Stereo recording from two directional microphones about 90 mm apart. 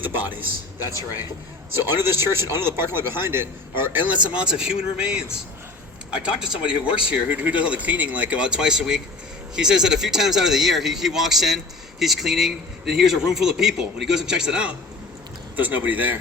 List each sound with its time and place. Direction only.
0.0 s a sound: 20° right (ahead or behind)
1.8 s a man's voice: 25° right (ahead or behind); by 5.2 s 10° right (ahead or behind)
6.2 s a man's voice: 10° right (ahead or behind)